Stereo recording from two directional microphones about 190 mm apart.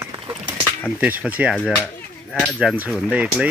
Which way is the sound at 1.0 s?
10° right (ahead or behind).